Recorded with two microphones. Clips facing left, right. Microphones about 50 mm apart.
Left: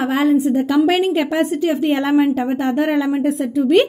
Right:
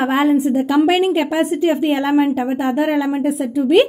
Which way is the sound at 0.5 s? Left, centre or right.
Centre.